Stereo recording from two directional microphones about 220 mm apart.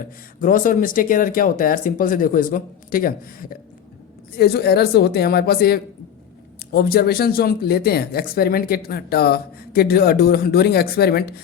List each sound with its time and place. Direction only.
0.3 s speech: 40° left (ahead or behind)